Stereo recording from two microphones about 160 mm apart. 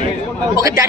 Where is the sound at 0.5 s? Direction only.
20° right (ahead or behind).